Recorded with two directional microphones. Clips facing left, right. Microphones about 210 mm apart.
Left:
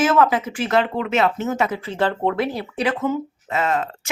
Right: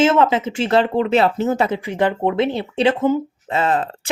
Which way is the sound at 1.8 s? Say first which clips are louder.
Right 2 dB; 15° right (ahead or behind).